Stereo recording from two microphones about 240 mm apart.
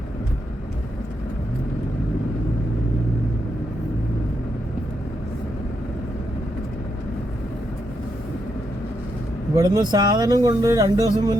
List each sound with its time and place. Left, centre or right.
9.6 s speech: centre